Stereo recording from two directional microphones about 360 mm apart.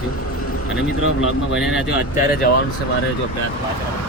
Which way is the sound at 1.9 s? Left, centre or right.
Left.